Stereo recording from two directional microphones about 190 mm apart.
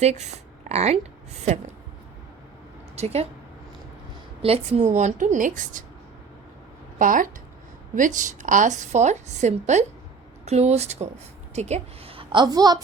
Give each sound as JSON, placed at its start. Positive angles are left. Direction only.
{"t": 0.0, "sound": "a woman's voice", "side_deg": -35}
{"t": 2.9, "sound": "a woman's voice", "side_deg": -35}
{"t": 4.4, "sound": "a woman's voice", "side_deg": -35}
{"t": 7.0, "sound": "a woman's voice", "side_deg": -45}